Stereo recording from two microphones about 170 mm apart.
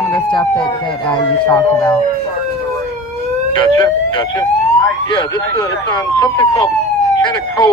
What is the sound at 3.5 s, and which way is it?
Speech, 30° left (ahead or behind).